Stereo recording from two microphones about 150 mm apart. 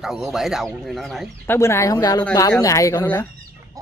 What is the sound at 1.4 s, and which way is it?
Speech, 15° left (ahead or behind).